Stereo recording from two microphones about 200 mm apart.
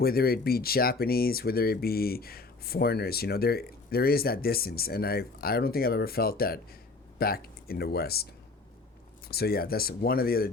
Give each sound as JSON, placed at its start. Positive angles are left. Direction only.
{"t": 0.0, "sound": "speech", "side_deg": 50}
{"t": 9.3, "sound": "speech", "side_deg": 50}